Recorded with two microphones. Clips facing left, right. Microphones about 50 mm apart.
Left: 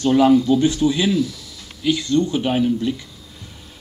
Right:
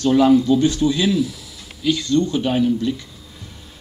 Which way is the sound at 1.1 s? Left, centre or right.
Centre.